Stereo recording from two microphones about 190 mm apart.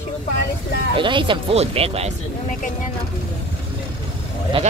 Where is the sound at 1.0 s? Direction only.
25° right (ahead or behind).